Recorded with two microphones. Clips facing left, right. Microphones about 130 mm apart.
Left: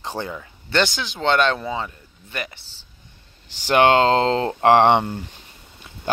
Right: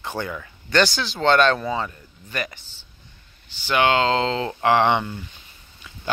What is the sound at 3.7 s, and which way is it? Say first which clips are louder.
Speech: left 4 dB; 45° left (ahead or behind).